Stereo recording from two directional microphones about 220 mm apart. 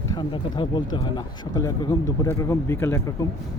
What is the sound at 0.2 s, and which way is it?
Speech, 20° left (ahead or behind).